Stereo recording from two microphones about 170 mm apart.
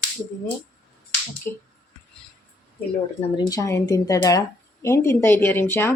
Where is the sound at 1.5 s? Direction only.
15° left (ahead or behind).